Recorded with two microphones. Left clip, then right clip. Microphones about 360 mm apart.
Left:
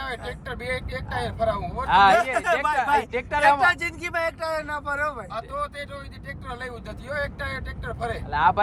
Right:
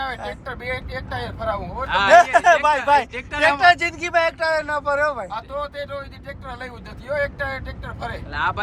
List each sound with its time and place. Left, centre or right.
0.0 s speech: centre
1.9 s speech: centre
2.1 s speech: centre
3.1 s speech: centre
3.6 s speech: centre
8.3 s speech: centre